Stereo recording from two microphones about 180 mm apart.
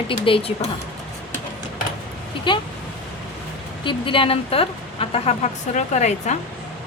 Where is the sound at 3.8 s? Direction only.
30° left (ahead or behind).